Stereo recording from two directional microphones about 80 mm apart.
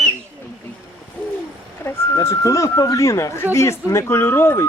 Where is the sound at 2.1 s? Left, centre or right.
Left.